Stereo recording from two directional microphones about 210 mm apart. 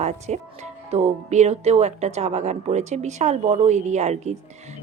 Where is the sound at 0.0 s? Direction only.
35° right (ahead or behind).